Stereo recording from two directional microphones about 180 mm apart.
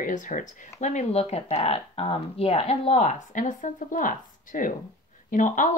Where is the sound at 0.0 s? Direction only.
45° left (ahead or behind).